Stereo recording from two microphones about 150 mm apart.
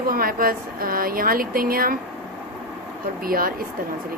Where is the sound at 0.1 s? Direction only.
75° right (ahead or behind).